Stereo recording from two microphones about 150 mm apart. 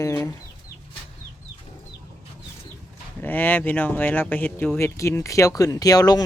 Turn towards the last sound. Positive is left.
turn(degrees=25)  # may be behind; listen again after turning